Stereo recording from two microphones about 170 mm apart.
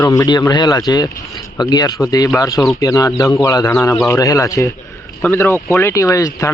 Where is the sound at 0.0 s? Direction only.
20° left (ahead or behind).